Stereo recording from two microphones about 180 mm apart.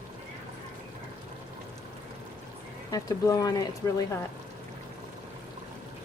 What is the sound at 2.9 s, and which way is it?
Speech, 20° left (ahead or behind).